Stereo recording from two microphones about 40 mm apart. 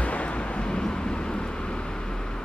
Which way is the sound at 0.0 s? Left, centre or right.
Left.